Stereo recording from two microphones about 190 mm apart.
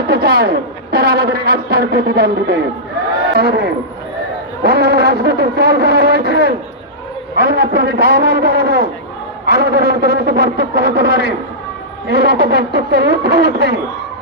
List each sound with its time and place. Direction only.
0.1 s a man's voice: 55° right (ahead or behind)